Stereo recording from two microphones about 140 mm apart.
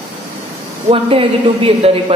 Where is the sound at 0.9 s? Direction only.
40° right (ahead or behind).